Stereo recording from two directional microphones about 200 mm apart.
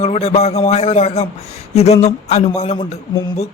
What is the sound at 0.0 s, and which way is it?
Speech, 30° left (ahead or behind).